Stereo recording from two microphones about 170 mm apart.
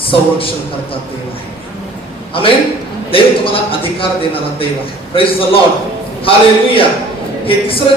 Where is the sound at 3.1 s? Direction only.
30° left (ahead or behind).